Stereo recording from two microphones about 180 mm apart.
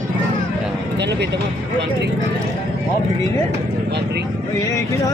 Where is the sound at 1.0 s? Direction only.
70° right (ahead or behind).